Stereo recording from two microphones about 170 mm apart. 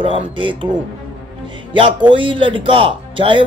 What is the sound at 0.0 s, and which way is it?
Speech, 30° right (ahead or behind).